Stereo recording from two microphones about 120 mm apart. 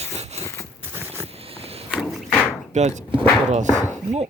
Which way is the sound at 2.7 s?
75° right (ahead or behind).